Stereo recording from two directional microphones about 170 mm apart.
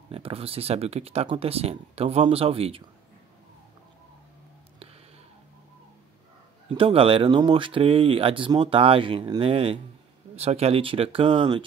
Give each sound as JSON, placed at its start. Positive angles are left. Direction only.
{"t": 0.1, "sound": "speech", "side_deg": -35}
{"t": 6.7, "sound": "speech", "side_deg": -30}